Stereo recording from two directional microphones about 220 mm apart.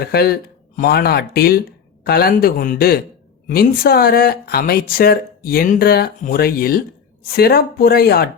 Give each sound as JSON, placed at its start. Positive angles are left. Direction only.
{"t": 0.0, "sound": "speech", "side_deg": 45}